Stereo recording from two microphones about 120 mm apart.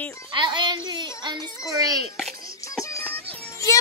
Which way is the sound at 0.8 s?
40° right (ahead or behind).